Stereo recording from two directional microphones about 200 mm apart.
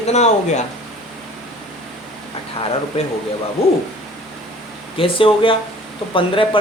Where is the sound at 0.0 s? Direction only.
35° left (ahead or behind).